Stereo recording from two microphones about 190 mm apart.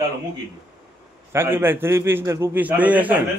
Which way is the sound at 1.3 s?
10° right (ahead or behind).